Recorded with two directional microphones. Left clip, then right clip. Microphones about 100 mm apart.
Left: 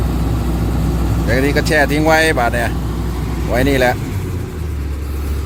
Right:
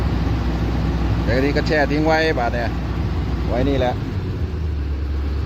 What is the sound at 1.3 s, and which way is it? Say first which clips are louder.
Speech: left 4 dB; 5° right (ahead or behind).